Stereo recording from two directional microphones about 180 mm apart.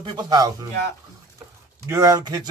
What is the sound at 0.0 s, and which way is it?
Speech, 25° right (ahead or behind).